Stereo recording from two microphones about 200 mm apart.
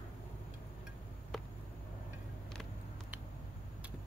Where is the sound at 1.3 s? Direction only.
Centre (ahead or behind).